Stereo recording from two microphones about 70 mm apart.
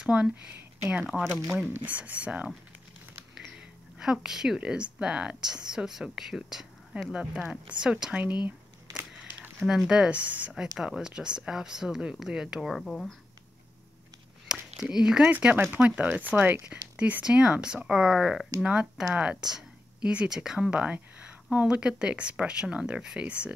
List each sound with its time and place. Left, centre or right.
0.0 s speech: centre
1.7 s speech: right
3.3 s a sound: centre
4.6 s speech: centre
9.6 s speech: centre; by 10.5 s right
10.5 s speech: centre
14.5 s a sound: centre
15.2 s speech: right